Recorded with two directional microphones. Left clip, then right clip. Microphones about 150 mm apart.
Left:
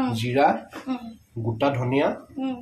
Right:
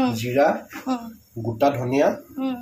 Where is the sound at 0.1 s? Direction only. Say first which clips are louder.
Right 1 dB; 35° left (ahead or behind).